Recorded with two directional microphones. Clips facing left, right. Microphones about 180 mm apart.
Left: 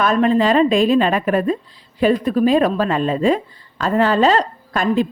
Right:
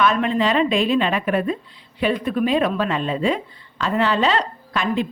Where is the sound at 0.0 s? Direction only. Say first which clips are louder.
Left 4 dB; 40° left (ahead or behind).